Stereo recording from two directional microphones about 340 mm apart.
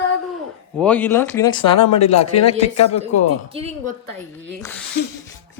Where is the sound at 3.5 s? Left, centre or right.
Centre.